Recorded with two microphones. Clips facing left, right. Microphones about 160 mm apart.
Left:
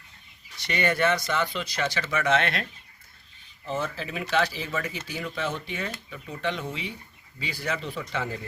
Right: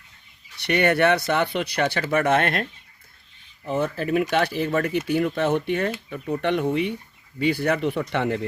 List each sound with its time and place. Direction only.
0.6 s speech: 60° right (ahead or behind)
3.7 s speech: 60° right (ahead or behind)